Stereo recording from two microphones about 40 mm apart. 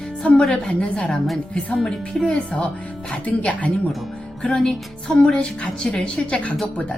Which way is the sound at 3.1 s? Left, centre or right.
Left.